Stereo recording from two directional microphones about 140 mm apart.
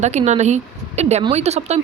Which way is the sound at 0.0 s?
55° right (ahead or behind).